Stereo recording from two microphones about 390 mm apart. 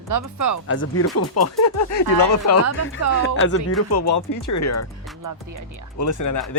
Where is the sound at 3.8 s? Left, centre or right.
Left.